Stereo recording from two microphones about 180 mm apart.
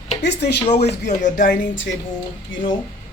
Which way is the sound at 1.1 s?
45° left (ahead or behind).